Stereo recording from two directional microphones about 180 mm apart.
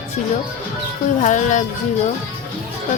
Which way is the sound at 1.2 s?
45° left (ahead or behind).